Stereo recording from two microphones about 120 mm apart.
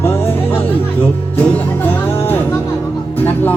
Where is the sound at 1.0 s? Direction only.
15° left (ahead or behind).